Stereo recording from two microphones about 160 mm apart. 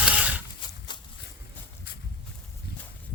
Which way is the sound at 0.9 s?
30° left (ahead or behind).